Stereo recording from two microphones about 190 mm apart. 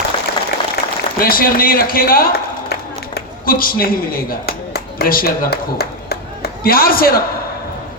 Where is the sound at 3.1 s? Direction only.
50° left (ahead or behind).